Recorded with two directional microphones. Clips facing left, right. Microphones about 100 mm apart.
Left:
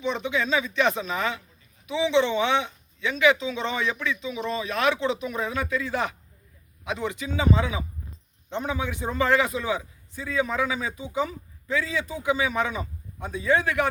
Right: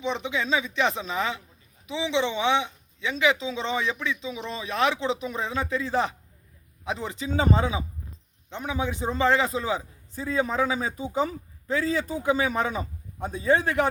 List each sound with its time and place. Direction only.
0.0 s a man's voice: 25° right (ahead or behind)
8.4 s a man's voice: 10° right (ahead or behind)
8.8 s a man's voice: 30° right (ahead or behind)